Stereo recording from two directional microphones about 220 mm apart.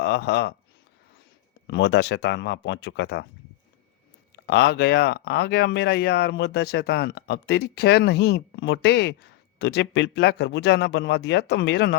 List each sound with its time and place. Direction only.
0.0 s speech: 50° left (ahead or behind)
1.6 s speech: 55° left (ahead or behind)
4.4 s speech: 50° left (ahead or behind)